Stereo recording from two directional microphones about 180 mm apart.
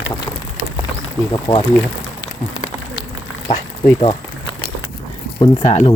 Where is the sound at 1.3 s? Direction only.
20° left (ahead or behind).